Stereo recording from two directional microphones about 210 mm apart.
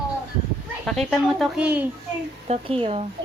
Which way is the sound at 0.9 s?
Centre (ahead or behind).